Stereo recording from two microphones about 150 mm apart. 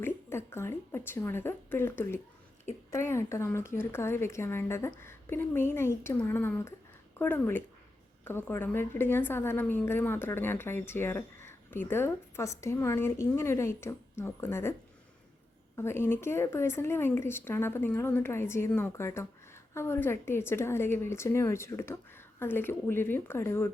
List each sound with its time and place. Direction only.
0.0 s a woman's voice: 15° left (ahead or behind)